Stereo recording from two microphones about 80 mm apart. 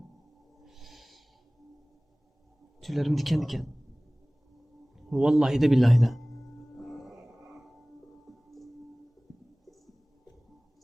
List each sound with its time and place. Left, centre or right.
0.6 s owl: centre
2.8 s speech: centre
5.0 s a sound: centre
7.3 s music: right
8.3 s music: centre